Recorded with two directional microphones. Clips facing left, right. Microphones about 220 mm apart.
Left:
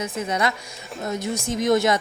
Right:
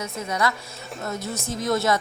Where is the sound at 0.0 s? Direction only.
20° left (ahead or behind).